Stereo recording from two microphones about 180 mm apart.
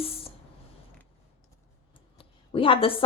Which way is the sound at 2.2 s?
30° left (ahead or behind).